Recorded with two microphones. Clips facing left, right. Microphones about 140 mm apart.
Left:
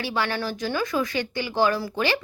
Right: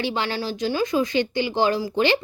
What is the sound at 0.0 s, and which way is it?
Speech, 25° right (ahead or behind).